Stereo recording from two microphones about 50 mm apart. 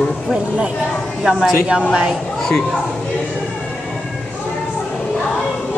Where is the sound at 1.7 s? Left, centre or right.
Right.